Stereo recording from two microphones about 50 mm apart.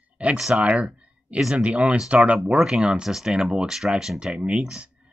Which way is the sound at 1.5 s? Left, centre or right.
Right.